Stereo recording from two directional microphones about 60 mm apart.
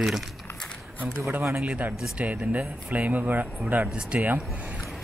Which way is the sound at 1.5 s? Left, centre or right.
Right.